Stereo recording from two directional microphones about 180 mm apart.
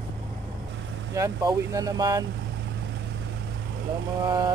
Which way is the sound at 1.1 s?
15° right (ahead or behind).